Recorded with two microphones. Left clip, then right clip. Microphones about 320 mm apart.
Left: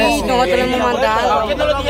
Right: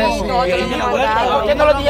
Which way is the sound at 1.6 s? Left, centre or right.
Centre.